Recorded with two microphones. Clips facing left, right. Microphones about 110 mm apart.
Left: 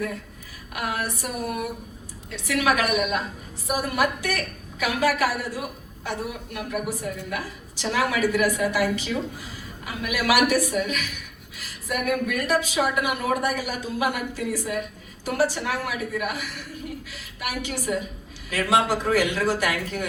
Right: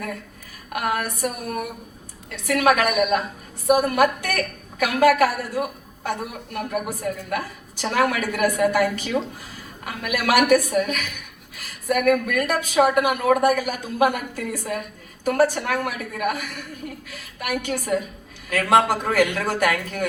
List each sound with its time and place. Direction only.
0.7 s a woman's voice: 50° right (ahead or behind)